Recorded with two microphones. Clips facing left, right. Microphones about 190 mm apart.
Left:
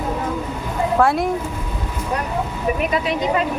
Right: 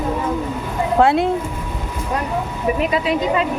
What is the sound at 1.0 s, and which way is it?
Speech, 25° right (ahead or behind).